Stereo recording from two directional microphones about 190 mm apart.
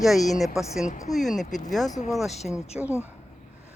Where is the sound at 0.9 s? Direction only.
40° left (ahead or behind).